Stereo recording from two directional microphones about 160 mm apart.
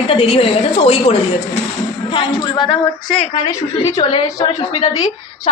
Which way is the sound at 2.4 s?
30° left (ahead or behind).